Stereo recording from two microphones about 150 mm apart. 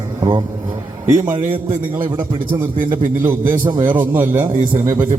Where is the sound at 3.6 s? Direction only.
30° right (ahead or behind).